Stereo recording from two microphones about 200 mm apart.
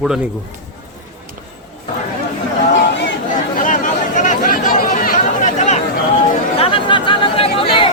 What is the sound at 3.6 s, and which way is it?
Chatter, 40° left (ahead or behind).